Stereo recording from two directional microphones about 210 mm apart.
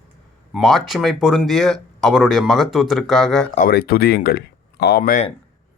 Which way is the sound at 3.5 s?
45° left (ahead or behind).